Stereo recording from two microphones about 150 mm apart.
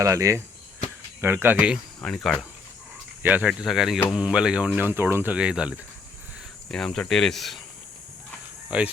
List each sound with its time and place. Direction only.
0.0 s speech: 20° right (ahead or behind)
2.0 s speech: 5° left (ahead or behind)
3.2 s speech: 10° right (ahead or behind)
8.7 s speech: 5° right (ahead or behind)